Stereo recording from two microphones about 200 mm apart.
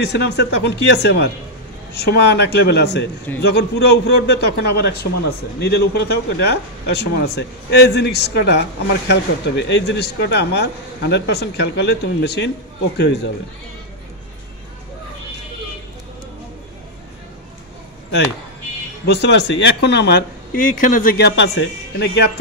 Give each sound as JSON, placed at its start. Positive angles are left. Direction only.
{"t": 0.0, "sound": "speech", "side_deg": 60}
{"t": 19.0, "sound": "speech", "side_deg": 60}